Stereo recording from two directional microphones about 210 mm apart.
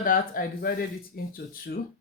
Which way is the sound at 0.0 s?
45° left (ahead or behind).